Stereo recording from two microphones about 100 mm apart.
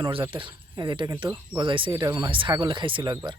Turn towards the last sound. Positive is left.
turn(degrees=-50)  # may be behind; listen again after turning